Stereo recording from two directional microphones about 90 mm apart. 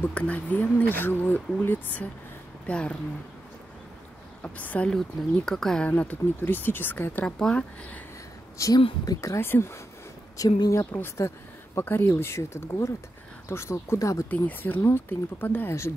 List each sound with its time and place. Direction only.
0.1 s speech: 15° left (ahead or behind)
4.4 s a woman's voice: 15° left (ahead or behind)
4.8 s speech: 5° left (ahead or behind)
5.9 s speech: 15° left (ahead or behind)
7.2 s speech: 10° left (ahead or behind)
8.6 s speech: 35° left (ahead or behind)
10.3 s speech: 40° left (ahead or behind)
10.9 s speech: 25° left (ahead or behind)
14.3 s speech: 20° left (ahead or behind)